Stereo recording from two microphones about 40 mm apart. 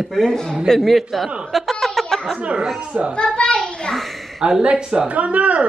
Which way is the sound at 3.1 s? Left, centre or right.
Left.